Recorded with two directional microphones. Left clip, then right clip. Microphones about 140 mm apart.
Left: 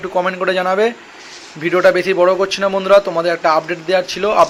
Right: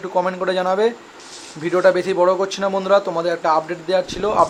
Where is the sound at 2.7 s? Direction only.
5° left (ahead or behind).